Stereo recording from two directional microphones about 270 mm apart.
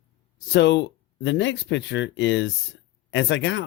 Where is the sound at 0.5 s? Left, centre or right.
Left.